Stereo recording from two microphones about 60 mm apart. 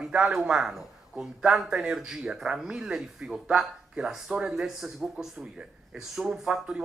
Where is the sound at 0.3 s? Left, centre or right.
Centre.